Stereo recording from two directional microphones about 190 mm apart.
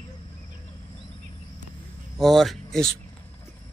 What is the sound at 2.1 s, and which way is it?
Speech, centre (ahead or behind).